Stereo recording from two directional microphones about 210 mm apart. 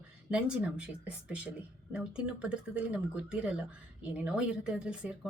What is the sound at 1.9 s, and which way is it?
A woman's voice, 5° right (ahead or behind).